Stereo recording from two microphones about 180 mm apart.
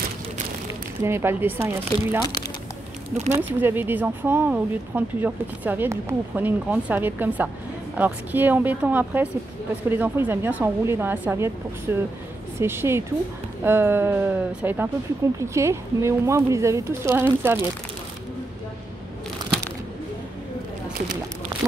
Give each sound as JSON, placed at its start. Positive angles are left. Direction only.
{"t": 1.0, "sound": "speech", "side_deg": -15}
{"t": 3.3, "sound": "speech", "side_deg": -10}